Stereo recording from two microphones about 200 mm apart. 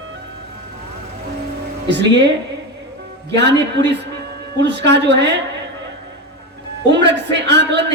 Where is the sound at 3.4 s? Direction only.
60° right (ahead or behind).